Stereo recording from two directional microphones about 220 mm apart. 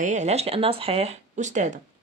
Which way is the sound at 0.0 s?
30° right (ahead or behind).